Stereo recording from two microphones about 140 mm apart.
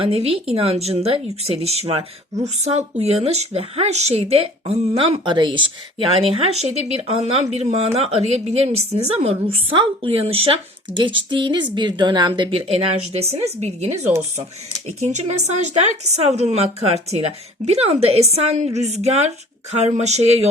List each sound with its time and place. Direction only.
0.0 s speech: 45° right (ahead or behind)
15.0 s speech: 55° right (ahead or behind)